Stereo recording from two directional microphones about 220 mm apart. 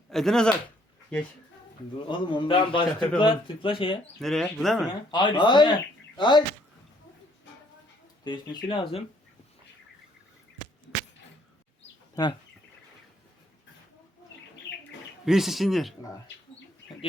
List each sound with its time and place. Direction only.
0.1 s speech: centre (ahead or behind)
2.0 s speech: 20° left (ahead or behind)
4.2 s a man's voice: centre (ahead or behind)
5.1 s speech: 20° left (ahead or behind)
8.2 s speech: 20° left (ahead or behind)
12.1 s speech: 20° left (ahead or behind)
15.2 s a man's voice: centre (ahead or behind)